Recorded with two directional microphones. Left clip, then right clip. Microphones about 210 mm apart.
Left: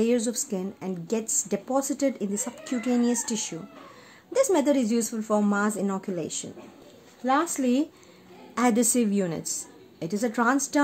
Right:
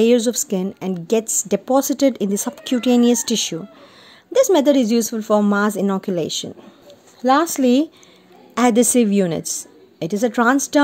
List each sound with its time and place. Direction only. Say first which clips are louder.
0.0 s a woman's voice: right 10 dB; 35° right (ahead or behind)